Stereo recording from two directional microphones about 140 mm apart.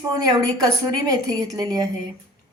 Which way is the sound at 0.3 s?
25° right (ahead or behind).